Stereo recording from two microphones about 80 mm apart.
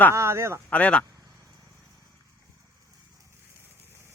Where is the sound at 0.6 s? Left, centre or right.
Centre.